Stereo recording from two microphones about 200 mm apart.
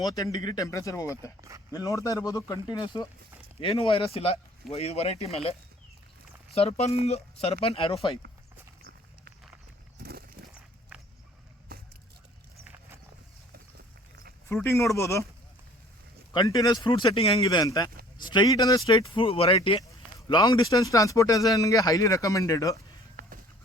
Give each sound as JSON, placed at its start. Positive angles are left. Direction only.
{"t": 0.0, "sound": "speech", "side_deg": 20}
{"t": 1.4, "sound": "speech", "side_deg": -15}
{"t": 1.7, "sound": "speech", "side_deg": 15}
{"t": 10.0, "sound": "horse", "side_deg": -50}
{"t": 11.7, "sound": "a sound", "side_deg": -50}
{"t": 12.6, "sound": "horse", "side_deg": -10}
{"t": 14.4, "sound": "speech", "side_deg": 15}
{"t": 16.3, "sound": "speech", "side_deg": 20}
{"t": 17.4, "sound": "speech", "side_deg": 20}